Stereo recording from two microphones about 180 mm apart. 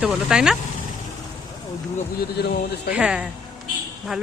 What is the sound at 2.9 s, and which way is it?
Speech, 5° right (ahead or behind).